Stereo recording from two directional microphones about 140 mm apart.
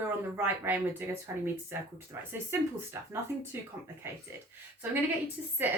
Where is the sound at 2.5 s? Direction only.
15° right (ahead or behind).